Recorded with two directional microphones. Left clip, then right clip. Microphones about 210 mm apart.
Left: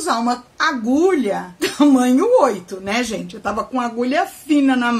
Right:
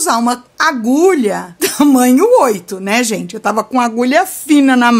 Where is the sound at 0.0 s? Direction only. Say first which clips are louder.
Right 5 dB; 50° right (ahead or behind).